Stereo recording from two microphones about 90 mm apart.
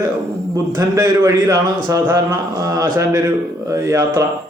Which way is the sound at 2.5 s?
40° right (ahead or behind).